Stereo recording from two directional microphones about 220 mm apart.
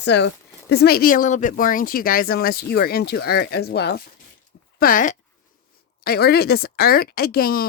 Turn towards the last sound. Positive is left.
turn(degrees=45)  # may be behind; listen again after turning